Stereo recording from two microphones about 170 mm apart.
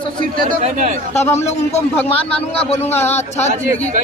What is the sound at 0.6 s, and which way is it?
Speech, 50° right (ahead or behind).